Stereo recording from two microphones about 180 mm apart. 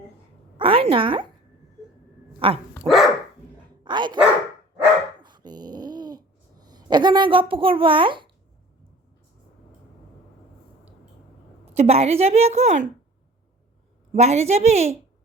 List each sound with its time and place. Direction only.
0.5 s a sound: 30° right (ahead or behind)
2.4 s a woman's voice: 30° right (ahead or behind)
2.8 s dog: centre (ahead or behind)
3.8 s speech: 25° right (ahead or behind)
5.2 s a sound: 25° right (ahead or behind)
11.6 s a woman's voice: 35° right (ahead or behind)
14.1 s a woman's voice: 40° right (ahead or behind)